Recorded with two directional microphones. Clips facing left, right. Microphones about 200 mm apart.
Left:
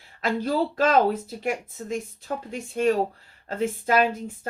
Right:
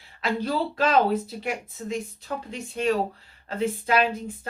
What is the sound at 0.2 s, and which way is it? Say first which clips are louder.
Speech: left 2 dB; 45° left (ahead or behind).